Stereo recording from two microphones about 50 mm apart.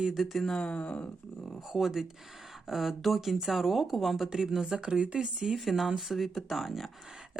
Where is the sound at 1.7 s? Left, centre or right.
Centre.